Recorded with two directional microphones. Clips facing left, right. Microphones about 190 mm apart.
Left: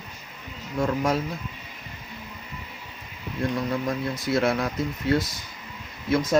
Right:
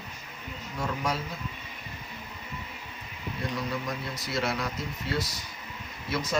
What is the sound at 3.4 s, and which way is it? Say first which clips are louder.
Speech: left 7 dB; 50° left (ahead or behind).